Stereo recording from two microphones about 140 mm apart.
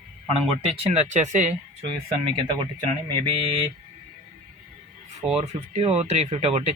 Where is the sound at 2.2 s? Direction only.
40° right (ahead or behind).